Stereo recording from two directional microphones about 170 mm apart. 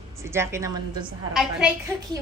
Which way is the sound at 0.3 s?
15° right (ahead or behind).